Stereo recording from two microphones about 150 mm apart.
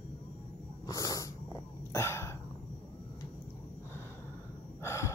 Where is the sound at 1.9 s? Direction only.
20° left (ahead or behind).